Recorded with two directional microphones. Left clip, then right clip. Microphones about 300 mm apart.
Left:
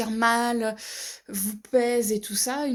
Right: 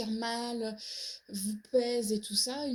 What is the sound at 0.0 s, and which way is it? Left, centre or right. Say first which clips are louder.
A woman's voice: left 13 dB; left.